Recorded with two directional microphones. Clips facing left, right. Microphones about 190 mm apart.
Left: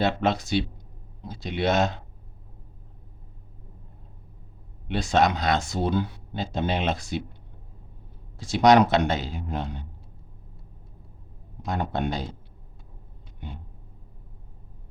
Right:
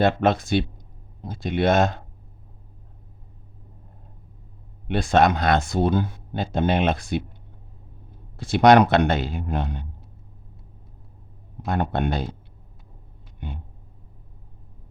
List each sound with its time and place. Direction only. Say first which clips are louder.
0.0 s speech: right 4 dB; 55° right (ahead or behind)
4.9 s speech: right 3 dB; 55° right (ahead or behind)
8.4 s speech: right 3 dB; 60° right (ahead or behind)
11.6 s speech: right 3 dB; 60° right (ahead or behind)